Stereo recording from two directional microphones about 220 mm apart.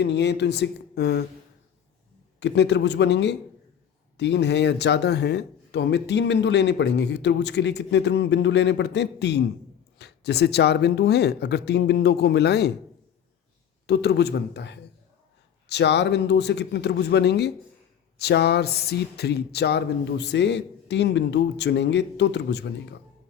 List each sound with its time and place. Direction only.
0.0 s speech: 50° left (ahead or behind)
2.4 s speech: 50° left (ahead or behind)
13.8 s speech: 50° left (ahead or behind)